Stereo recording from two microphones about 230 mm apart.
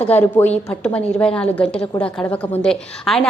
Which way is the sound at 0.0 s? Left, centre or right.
Centre.